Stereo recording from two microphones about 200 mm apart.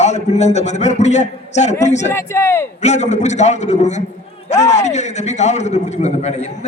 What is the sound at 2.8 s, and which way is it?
A man's voice, 35° left (ahead or behind).